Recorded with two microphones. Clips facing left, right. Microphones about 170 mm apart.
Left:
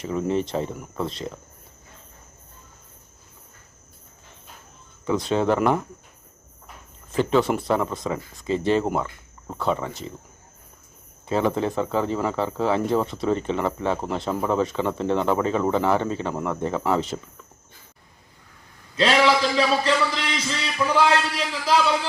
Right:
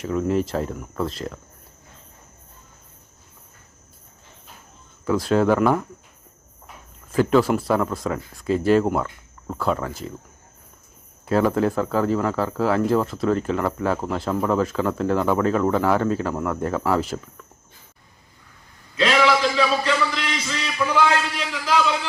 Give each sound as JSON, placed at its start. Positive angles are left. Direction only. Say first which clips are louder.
{"t": 0.0, "sound": "speech", "louder": "right 2 dB", "side_deg": 0}
{"t": 5.0, "sound": "speech", "louder": "right 3 dB", "side_deg": -5}
{"t": 7.1, "sound": "speech", "louder": "right 3 dB", "side_deg": -5}
{"t": 11.3, "sound": "speech", "louder": "right 3 dB", "side_deg": 0}
{"t": 18.9, "sound": "a sound", "louder": "even", "side_deg": 35}